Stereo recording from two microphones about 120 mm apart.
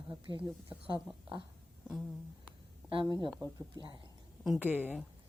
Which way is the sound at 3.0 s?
30° right (ahead or behind).